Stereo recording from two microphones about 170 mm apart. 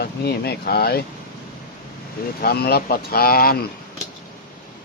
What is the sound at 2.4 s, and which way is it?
Speech, 65° left (ahead or behind).